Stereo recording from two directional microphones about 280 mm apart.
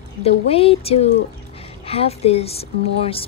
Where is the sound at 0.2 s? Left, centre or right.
Centre.